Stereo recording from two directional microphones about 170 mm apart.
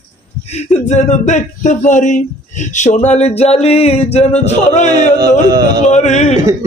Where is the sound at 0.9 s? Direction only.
45° left (ahead or behind).